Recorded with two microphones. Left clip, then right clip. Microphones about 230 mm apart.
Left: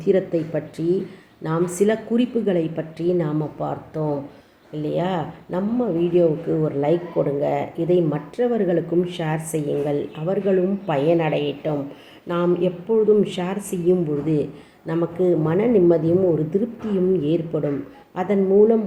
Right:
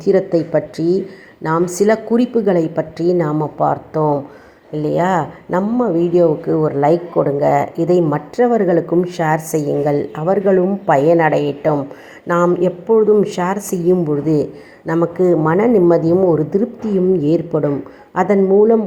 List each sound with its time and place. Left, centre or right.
0.0 s speech: centre